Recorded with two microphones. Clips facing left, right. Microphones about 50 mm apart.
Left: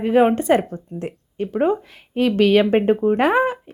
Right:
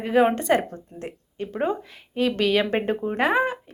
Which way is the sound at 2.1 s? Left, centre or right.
Left.